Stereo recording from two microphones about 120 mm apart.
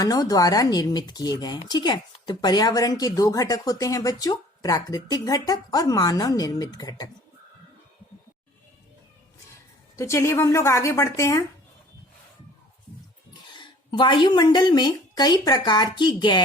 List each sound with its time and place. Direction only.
0.0 s speech: 30° left (ahead or behind)
10.0 s a woman's voice: 25° left (ahead or behind)
13.5 s speech: 40° left (ahead or behind)